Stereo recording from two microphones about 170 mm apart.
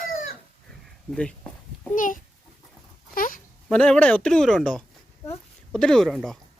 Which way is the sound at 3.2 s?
55° left (ahead or behind).